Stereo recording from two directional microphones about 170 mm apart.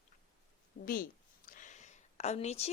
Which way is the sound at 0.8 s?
50° left (ahead or behind).